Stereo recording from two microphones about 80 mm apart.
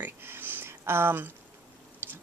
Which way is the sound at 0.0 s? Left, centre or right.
Right.